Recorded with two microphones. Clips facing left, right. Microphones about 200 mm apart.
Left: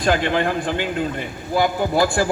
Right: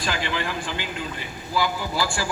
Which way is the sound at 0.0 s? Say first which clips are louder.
Left 9 dB; 55° left (ahead or behind).